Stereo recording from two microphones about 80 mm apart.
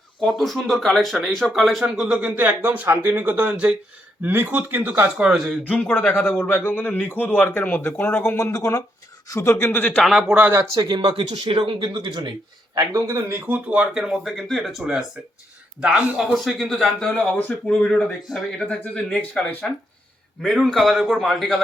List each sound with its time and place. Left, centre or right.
0.2 s speech: centre; by 5.1 s right
5.6 s a man's voice: centre
8.4 s speech: left
9.6 s a man's voice: centre
10.0 s speech: centre
10.8 s speech: right
12.7 s speech: right; by 13.8 s centre
13.9 s speech: centre
16.2 s speech: centre
17.2 s speech: centre
19.6 s speech: centre